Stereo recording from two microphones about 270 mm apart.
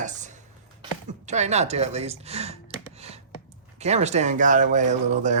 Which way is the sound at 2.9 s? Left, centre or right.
Right.